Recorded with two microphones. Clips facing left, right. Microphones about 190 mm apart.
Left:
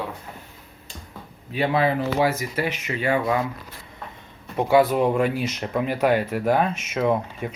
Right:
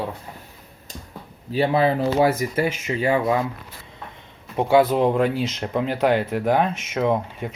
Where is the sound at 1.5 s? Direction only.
30° right (ahead or behind).